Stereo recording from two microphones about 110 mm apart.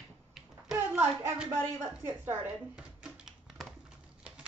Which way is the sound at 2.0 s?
20° right (ahead or behind).